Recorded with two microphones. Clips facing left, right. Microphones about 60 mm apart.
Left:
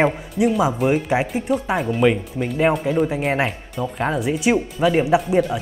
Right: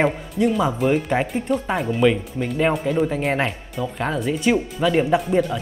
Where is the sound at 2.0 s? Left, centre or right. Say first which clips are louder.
Right 1 dB; centre.